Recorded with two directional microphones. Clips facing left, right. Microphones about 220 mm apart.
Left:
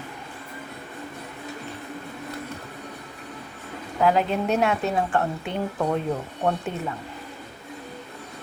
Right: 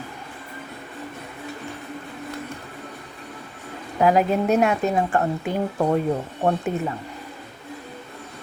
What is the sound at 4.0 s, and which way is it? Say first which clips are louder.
A woman's voice: right 3 dB; 10° right (ahead or behind).